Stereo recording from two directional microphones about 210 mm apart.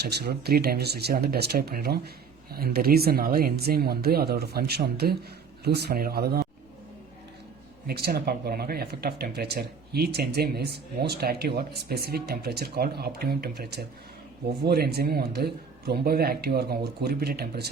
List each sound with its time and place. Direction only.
0.0 s speech: 50° right (ahead or behind)
7.9 s speech: 50° right (ahead or behind)